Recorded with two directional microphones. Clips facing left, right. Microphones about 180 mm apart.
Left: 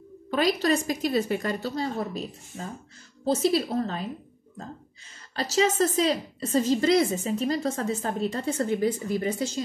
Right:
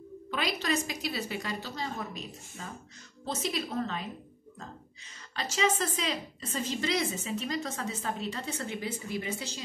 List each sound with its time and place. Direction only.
0.3 s a woman's voice: 45° left (ahead or behind)
5.3 s a woman's voice: 40° left (ahead or behind)